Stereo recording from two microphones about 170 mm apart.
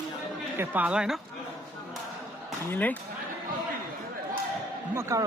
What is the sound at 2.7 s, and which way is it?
Speech, 10° left (ahead or behind).